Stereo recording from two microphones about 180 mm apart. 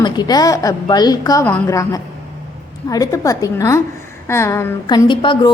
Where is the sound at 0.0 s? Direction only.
20° left (ahead or behind).